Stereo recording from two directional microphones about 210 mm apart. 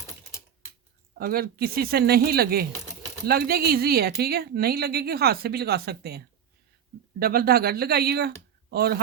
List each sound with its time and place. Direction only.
1.2 s a woman's voice: 45° right (ahead or behind)